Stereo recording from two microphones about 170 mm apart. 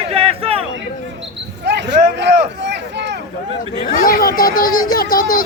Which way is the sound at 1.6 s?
90° right.